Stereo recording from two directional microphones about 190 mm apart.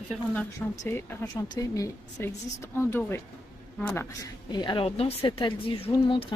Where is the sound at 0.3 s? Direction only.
10° left (ahead or behind).